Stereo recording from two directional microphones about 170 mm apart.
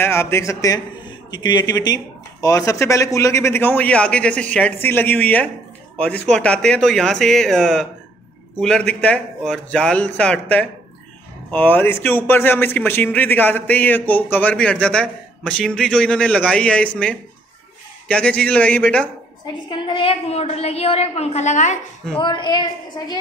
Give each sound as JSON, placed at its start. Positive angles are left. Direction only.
{"t": 0.0, "sound": "a woman's voice", "side_deg": 15}
{"t": 19.4, "sound": "a woman's voice", "side_deg": 30}
{"t": 22.2, "sound": "a woman's voice", "side_deg": 25}